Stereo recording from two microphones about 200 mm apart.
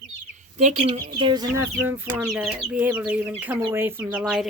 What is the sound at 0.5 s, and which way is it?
Speech, 40° right (ahead or behind).